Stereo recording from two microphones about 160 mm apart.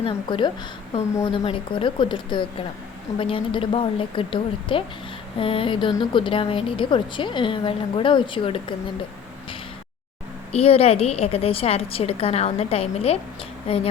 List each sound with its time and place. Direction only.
0.0 s a woman's voice: 30° left (ahead or behind)
10.5 s a woman's voice: 40° left (ahead or behind)